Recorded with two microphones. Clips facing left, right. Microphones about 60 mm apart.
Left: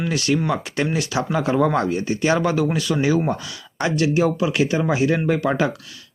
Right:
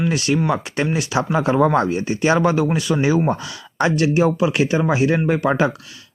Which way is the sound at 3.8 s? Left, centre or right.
Right.